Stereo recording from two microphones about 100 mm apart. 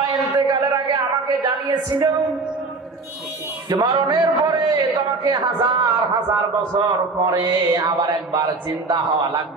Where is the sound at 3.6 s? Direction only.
40° right (ahead or behind).